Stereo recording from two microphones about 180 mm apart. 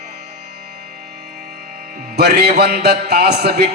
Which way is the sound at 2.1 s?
60° right (ahead or behind).